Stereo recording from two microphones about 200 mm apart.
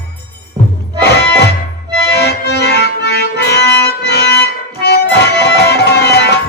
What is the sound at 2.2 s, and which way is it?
Accordion, 55° left (ahead or behind).